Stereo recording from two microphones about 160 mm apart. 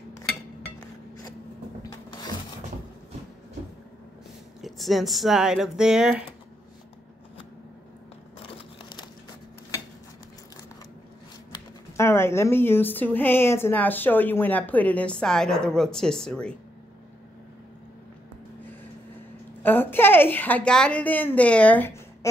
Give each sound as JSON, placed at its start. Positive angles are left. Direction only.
{"t": 1.8, "sound": "rub", "side_deg": 30}
{"t": 4.6, "sound": "speech", "side_deg": 0}
{"t": 8.4, "sound": "a sound", "side_deg": 30}
{"t": 12.0, "sound": "a woman's voice", "side_deg": 15}
{"t": 19.6, "sound": "a woman's voice", "side_deg": 10}